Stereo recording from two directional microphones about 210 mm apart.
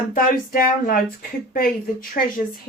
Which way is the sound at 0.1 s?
40° left (ahead or behind).